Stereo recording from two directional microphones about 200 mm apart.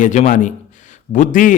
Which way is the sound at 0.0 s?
40° left (ahead or behind).